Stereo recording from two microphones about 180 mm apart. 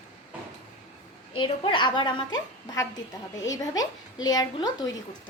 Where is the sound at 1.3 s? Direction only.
25° left (ahead or behind).